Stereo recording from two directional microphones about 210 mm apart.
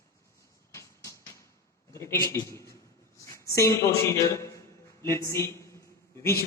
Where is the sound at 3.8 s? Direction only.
15° left (ahead or behind).